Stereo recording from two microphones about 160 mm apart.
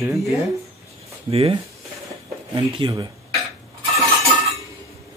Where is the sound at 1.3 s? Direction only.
40° right (ahead or behind).